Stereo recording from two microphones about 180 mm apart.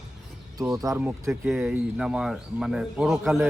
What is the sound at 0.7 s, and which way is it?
Speech, 20° right (ahead or behind).